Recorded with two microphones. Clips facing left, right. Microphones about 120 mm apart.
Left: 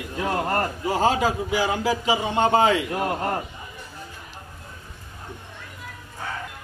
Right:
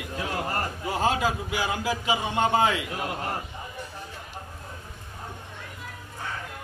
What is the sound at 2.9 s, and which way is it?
Speech, 50° left (ahead or behind).